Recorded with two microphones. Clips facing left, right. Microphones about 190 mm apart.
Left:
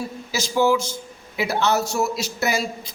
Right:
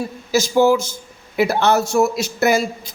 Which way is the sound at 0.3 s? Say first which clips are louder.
Right 5 dB; 45° right (ahead or behind).